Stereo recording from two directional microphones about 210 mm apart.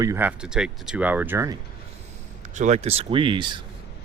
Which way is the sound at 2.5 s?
30° right (ahead or behind).